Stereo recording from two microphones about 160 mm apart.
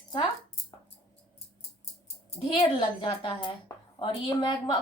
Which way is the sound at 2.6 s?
30° left (ahead or behind).